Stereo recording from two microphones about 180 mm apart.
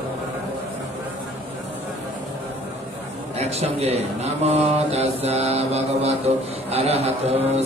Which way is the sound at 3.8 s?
35° right (ahead or behind).